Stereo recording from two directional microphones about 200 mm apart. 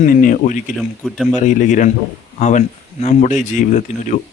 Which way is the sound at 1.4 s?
40° left (ahead or behind).